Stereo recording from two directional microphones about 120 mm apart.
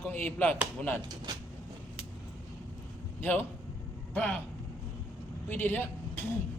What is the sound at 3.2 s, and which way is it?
A man's voice, 15° left (ahead or behind).